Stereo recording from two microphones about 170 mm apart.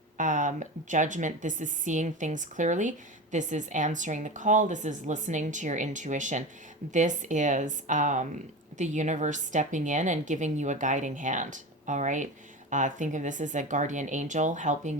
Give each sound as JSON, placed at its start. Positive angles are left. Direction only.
{"t": 0.2, "sound": "a woman's voice", "side_deg": -50}